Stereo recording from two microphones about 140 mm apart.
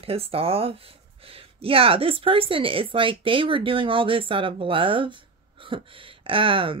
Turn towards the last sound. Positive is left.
turn(degrees=-40)  # may be behind; listen again after turning